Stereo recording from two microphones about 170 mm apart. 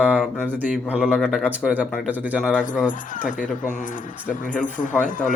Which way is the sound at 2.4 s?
5° left (ahead or behind).